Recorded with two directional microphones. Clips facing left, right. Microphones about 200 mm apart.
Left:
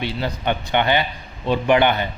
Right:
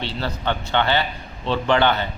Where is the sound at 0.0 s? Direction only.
15° left (ahead or behind).